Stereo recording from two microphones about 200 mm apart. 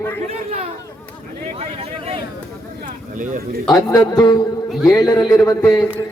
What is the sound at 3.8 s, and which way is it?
Speech, 20° left (ahead or behind).